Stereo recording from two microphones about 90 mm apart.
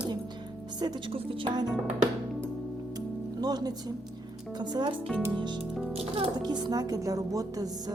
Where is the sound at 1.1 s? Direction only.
60° right (ahead or behind).